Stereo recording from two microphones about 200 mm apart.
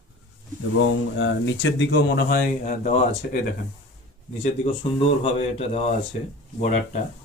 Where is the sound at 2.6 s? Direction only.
40° left (ahead or behind).